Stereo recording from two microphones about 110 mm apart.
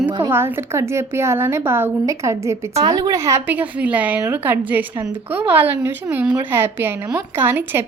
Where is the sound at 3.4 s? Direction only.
15° right (ahead or behind).